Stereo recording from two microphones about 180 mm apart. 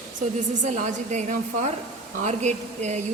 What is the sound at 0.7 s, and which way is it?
A woman's voice, 40° right (ahead or behind).